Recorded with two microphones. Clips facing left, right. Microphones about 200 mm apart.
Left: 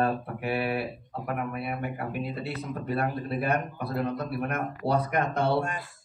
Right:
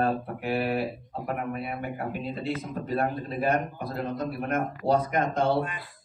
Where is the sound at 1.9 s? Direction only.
65° left (ahead or behind).